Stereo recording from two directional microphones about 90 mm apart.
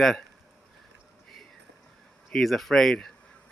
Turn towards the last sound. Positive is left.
turn(degrees=5)  # may be behind; listen again after turning